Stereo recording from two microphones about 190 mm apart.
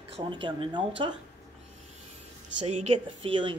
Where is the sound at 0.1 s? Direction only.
25° right (ahead or behind).